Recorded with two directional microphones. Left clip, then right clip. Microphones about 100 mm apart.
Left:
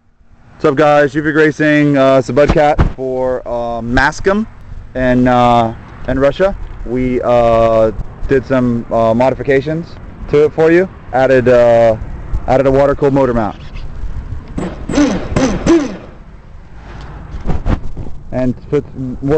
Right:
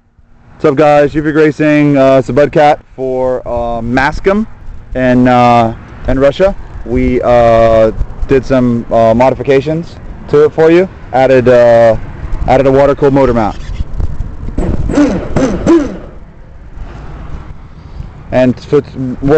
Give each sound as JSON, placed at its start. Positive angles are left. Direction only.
{"t": 0.6, "sound": "speech", "side_deg": 0}
{"t": 4.9, "sound": "speech", "side_deg": -25}
{"t": 14.6, "sound": "a sound", "side_deg": 15}